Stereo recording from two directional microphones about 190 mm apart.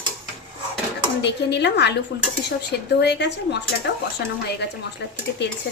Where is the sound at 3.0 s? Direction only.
65° left (ahead or behind).